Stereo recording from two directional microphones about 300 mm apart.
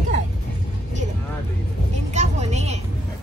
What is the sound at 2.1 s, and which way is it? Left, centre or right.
Vehicle, right.